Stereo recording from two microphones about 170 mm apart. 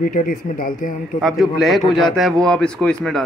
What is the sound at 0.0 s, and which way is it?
Speech, 55° left (ahead or behind).